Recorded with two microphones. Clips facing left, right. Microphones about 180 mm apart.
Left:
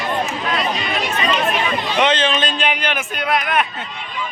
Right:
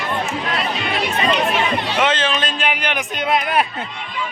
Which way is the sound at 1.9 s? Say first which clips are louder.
Left 4 dB; 5° right (ahead or behind).